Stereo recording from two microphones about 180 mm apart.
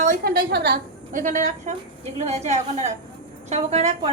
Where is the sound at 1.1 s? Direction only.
45° right (ahead or behind).